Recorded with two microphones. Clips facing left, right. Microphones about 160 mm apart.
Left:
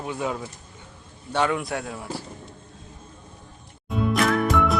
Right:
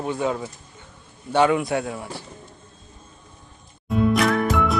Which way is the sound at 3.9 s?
Centre (ahead or behind).